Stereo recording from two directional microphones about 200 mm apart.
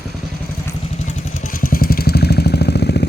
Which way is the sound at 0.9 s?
40° left (ahead or behind).